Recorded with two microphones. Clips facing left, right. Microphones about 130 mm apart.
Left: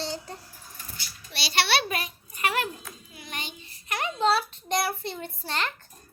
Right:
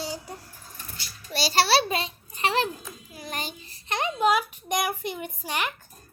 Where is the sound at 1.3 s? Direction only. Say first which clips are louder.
Right 4 dB; 40° right (ahead or behind).